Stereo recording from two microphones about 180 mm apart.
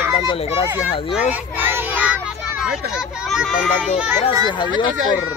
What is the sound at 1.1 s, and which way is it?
A child's voice, 10° right (ahead or behind).